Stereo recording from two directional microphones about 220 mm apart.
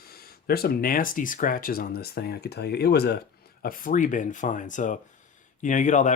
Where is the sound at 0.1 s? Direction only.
45° left (ahead or behind).